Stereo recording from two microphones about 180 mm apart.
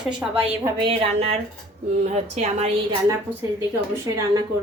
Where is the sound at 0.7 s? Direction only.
30° right (ahead or behind).